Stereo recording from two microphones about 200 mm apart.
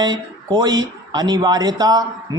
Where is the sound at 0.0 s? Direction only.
20° right (ahead or behind).